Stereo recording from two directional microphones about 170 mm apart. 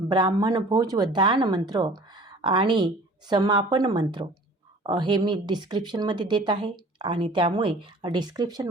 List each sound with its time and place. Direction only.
0.1 s speech: 25° right (ahead or behind)